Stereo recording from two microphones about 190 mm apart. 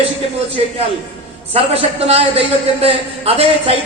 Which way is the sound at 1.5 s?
30° right (ahead or behind).